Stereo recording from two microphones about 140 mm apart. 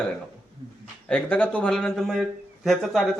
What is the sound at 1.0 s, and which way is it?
A man's voice, 10° left (ahead or behind).